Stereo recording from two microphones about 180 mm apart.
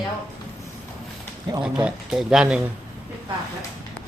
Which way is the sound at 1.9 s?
5° right (ahead or behind).